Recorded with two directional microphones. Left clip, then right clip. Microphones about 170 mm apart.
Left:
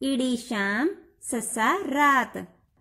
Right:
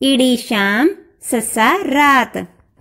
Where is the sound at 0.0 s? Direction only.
20° right (ahead or behind).